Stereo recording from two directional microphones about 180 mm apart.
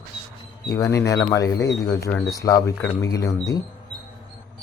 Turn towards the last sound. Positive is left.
turn(degrees=20)  # may be behind; listen again after turning